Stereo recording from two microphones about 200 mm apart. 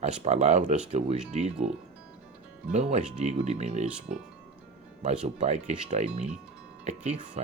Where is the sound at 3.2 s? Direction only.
30° right (ahead or behind).